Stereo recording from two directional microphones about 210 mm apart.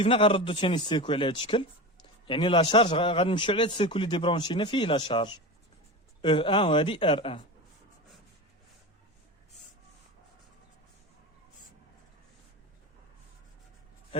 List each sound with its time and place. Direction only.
0.0 s a man's voice: 25° left (ahead or behind)
14.1 s vehicle: 25° left (ahead or behind)